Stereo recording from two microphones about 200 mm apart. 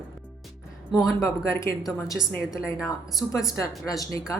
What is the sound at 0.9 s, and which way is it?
Speech, centre (ahead or behind).